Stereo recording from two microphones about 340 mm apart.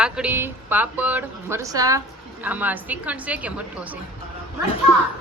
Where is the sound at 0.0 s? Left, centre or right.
Centre.